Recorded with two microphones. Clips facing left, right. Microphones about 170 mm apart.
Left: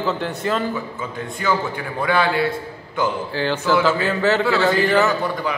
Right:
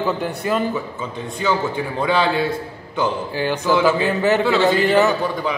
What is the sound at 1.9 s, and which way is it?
A man's voice, 25° right (ahead or behind).